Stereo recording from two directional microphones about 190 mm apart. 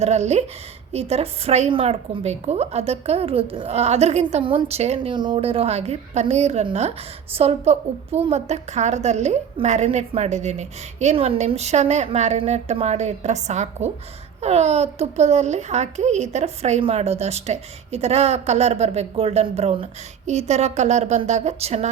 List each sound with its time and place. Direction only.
0.0 s a child's voice: 35° right (ahead or behind)